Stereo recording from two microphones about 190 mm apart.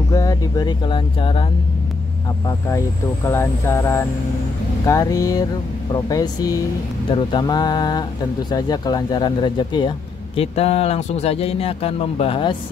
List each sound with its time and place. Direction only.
0.1 s speech: 20° left (ahead or behind)
3.3 s speech: 15° left (ahead or behind)